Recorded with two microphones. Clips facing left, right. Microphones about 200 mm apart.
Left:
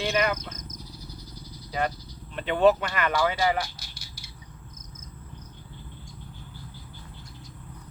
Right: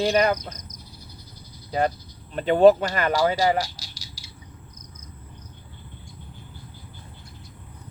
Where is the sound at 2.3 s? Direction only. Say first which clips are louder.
Right 6 dB; 40° right (ahead or behind).